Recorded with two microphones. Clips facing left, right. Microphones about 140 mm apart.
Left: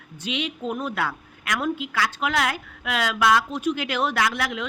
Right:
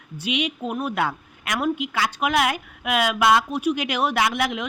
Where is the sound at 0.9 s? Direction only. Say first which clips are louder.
Right 3 dB; 20° right (ahead or behind).